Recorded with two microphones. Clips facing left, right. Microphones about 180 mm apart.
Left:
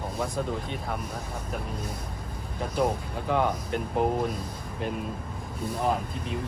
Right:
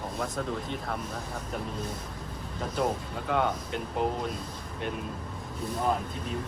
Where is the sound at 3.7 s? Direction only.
50° left (ahead or behind).